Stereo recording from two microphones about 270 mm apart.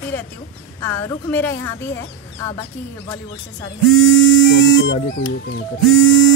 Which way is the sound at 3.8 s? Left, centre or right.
Left.